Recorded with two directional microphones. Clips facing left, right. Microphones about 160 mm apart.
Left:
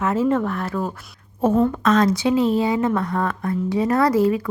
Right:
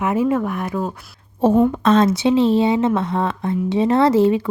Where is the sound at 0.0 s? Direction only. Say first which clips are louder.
Right 1 dB; 15° right (ahead or behind).